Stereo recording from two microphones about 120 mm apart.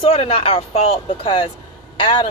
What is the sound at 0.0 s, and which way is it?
Speech, 55° left (ahead or behind).